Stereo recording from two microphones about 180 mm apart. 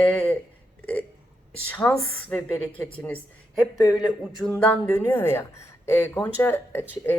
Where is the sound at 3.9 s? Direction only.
Centre (ahead or behind).